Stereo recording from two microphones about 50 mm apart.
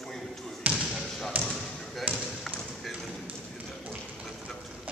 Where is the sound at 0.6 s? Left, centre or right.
Right.